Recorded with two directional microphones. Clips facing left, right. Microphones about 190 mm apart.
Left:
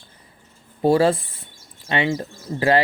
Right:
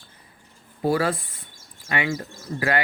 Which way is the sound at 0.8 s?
25° left (ahead or behind).